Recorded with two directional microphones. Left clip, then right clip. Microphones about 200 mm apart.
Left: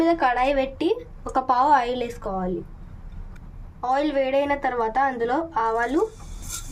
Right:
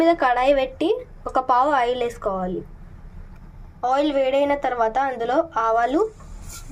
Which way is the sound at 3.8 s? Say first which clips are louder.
Right 3 dB; 5° right (ahead or behind).